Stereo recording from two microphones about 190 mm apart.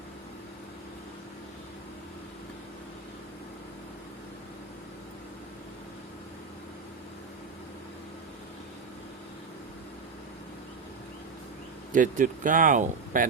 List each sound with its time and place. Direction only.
11.9 s speech: 45° right (ahead or behind)